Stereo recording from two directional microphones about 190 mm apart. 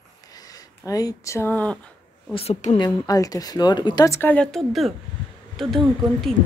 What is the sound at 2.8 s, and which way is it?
Speech, 20° left (ahead or behind).